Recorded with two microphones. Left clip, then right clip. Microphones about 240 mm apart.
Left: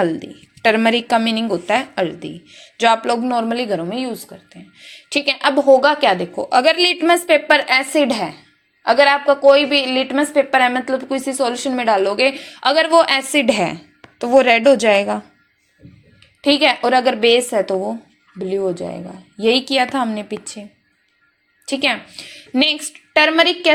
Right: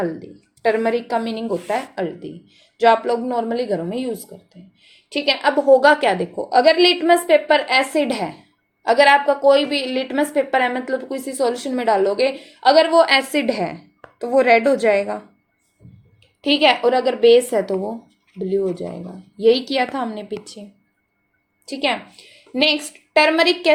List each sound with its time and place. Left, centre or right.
0.0 s a woman's voice: left; by 4.1 s centre
4.8 s a woman's voice: left
16.4 s a woman's voice: centre
21.7 s a woman's voice: left